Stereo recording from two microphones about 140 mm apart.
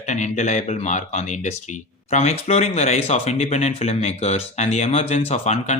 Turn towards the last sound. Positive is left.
turn(degrees=55)  # may be behind; listen again after turning